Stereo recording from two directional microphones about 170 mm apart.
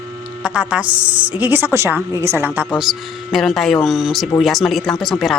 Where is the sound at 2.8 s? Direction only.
Centre (ahead or behind).